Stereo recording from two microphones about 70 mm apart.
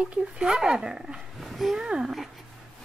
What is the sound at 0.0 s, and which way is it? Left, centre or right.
Speech, centre.